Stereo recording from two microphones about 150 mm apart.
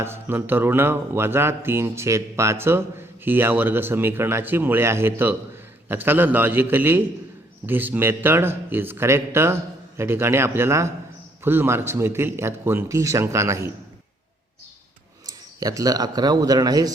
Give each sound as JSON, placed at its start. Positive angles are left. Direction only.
{"t": 0.0, "sound": "speech", "side_deg": -15}
{"t": 15.6, "sound": "a man's voice", "side_deg": -25}